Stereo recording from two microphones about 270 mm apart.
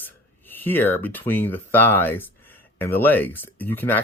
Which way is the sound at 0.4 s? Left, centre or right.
Centre.